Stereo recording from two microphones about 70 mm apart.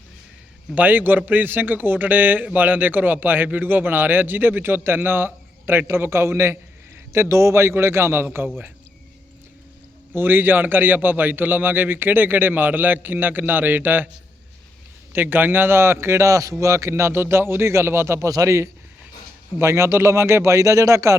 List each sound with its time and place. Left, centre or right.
0.8 s a man's voice: right
10.2 s a man's voice: right
15.1 s a man's voice: right
18.3 s speech: right